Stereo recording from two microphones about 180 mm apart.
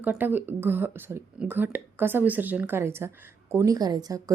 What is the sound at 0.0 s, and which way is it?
A woman's voice, 10° right (ahead or behind).